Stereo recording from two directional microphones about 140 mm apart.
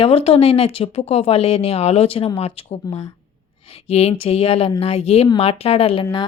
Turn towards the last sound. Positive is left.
turn(degrees=35)  # may be behind; listen again after turning